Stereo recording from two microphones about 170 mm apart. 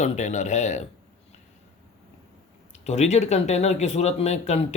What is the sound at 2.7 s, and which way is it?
Speech, 40° left (ahead or behind).